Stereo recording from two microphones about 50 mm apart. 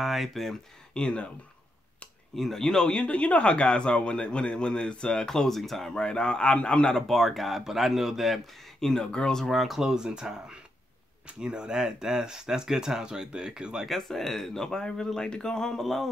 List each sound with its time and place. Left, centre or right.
0.0 s speech: centre
0.9 s a man's voice: left
2.3 s speech: centre
2.9 s a man's voice: left
7.1 s speech: centre
8.8 s speech: centre
9.5 s speech: centre
13.8 s speech: centre